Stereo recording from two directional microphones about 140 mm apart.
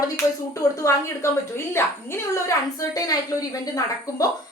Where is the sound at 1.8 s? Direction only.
15° left (ahead or behind).